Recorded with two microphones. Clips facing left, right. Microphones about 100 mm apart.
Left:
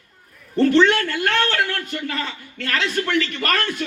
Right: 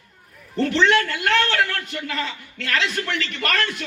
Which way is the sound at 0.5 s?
45° left (ahead or behind).